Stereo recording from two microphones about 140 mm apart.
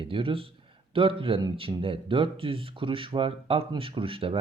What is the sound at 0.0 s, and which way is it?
Speech, 40° right (ahead or behind).